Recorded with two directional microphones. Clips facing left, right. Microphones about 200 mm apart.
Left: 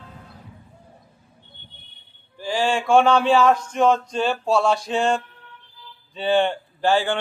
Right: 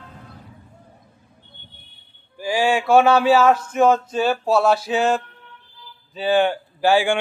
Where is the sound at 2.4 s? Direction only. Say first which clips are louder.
Right 3 dB; 10° right (ahead or behind).